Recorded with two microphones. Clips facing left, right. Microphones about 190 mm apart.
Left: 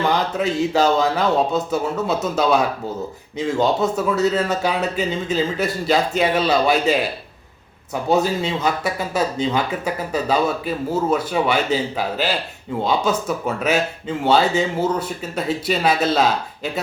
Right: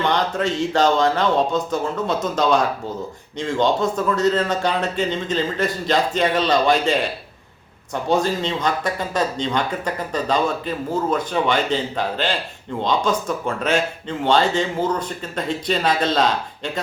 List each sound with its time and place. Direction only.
0.0 s speech: 5° left (ahead or behind)